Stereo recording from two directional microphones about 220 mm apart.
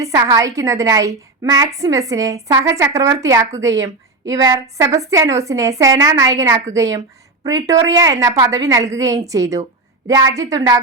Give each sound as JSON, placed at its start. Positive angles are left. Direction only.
{"t": 0.0, "sound": "a woman's voice", "side_deg": -15}